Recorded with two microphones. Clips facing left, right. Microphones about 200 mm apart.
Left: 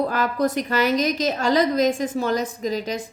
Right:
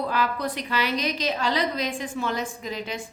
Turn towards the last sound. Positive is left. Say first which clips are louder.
# left 7 dB
turn(degrees=40)  # may be behind; listen again after turning